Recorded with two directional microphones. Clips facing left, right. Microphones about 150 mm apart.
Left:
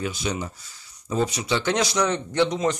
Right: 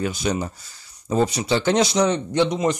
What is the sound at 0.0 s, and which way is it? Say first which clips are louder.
Speech: right 4 dB; 45° right (ahead or behind).